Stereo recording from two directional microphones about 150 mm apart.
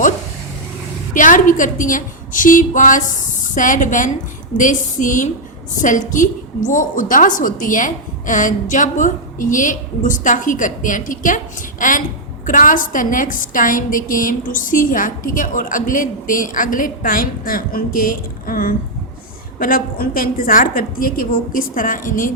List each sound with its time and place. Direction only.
1.1 s a woman's voice: 60° left (ahead or behind)